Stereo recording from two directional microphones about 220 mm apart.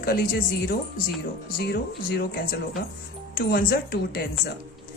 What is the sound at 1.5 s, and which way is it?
A woman's voice, 45° left (ahead or behind).